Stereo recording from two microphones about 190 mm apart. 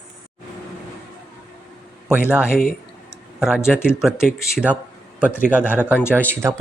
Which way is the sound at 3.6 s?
5° right (ahead or behind).